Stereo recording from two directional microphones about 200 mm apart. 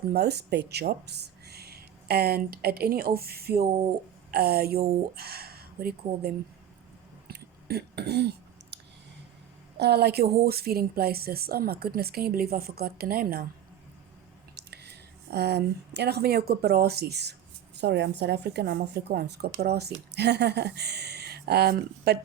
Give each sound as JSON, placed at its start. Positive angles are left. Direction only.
{"t": 0.1, "sound": "speech", "side_deg": -55}
{"t": 7.3, "sound": "a sound", "side_deg": -55}
{"t": 9.7, "sound": "a woman's voice", "side_deg": -55}
{"t": 14.5, "sound": "a woman's voice", "side_deg": -55}